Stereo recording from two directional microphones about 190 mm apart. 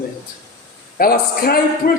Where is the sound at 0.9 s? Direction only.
50° left (ahead or behind).